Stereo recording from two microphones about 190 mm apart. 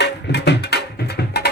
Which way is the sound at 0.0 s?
60° left (ahead or behind).